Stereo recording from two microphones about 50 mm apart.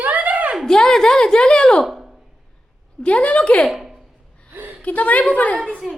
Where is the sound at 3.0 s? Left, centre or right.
Left.